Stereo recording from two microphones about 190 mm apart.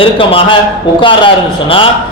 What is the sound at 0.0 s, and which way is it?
A man's voice, 30° left (ahead or behind).